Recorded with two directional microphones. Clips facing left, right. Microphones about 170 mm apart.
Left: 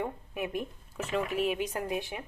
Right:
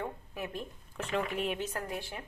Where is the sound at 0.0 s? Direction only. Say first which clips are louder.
Left 4 dB; 15° left (ahead or behind).